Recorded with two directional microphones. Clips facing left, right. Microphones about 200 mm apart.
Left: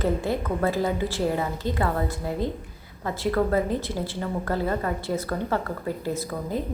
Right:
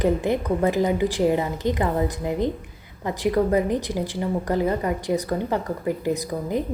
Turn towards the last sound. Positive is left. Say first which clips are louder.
# right 2 dB
turn(degrees=-15)  # may be behind; listen again after turning